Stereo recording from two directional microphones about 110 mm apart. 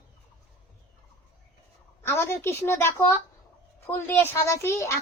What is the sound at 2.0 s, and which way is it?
A woman's voice, 25° left (ahead or behind).